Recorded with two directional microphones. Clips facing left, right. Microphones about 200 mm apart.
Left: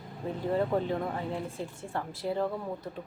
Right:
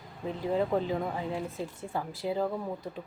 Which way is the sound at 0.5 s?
Centre (ahead or behind).